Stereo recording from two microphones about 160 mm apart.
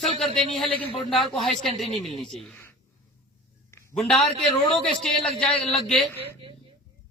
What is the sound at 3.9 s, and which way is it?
A man's voice, centre (ahead or behind).